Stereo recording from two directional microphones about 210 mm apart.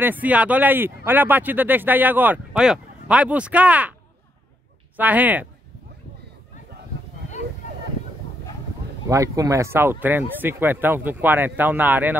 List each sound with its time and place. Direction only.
0.0 s speech: 10° right (ahead or behind)
4.9 s speech: 10° right (ahead or behind)
9.1 s speech: 15° right (ahead or behind)